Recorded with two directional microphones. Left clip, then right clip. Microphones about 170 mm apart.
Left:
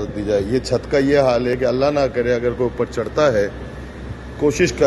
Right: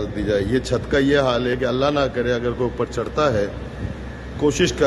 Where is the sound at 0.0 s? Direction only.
10° left (ahead or behind).